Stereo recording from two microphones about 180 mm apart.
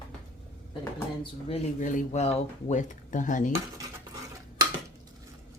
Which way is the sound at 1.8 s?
45° left (ahead or behind).